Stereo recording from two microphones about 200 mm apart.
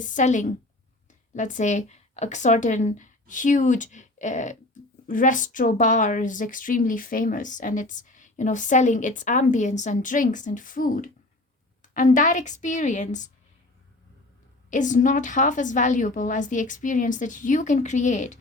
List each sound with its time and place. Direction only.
0.1 s speech: 40° left (ahead or behind)
14.7 s speech: 40° left (ahead or behind)